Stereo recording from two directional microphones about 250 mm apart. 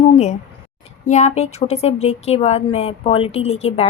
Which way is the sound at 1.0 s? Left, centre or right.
Left.